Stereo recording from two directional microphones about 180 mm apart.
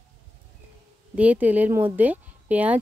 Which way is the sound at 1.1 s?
10° right (ahead or behind).